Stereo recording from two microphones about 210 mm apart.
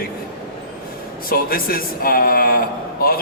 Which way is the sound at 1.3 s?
45° left (ahead or behind).